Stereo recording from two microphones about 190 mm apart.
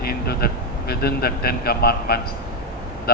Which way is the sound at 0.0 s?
55° left (ahead or behind).